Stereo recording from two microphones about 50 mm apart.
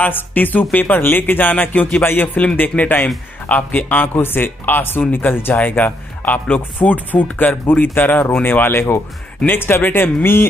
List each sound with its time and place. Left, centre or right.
0.0 s speech: left